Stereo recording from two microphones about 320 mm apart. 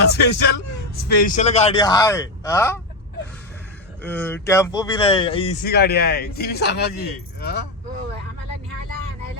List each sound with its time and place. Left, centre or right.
0.1 s speech: left; by 2.8 s centre
4.0 s speech: centre
5.6 s speech: left